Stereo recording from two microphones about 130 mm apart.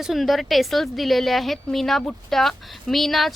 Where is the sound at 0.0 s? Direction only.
Centre (ahead or behind).